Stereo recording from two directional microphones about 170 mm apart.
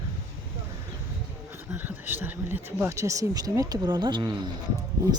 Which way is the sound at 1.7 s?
10° right (ahead or behind).